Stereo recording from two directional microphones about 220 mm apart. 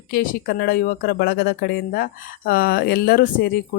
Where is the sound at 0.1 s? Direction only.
45° left (ahead or behind).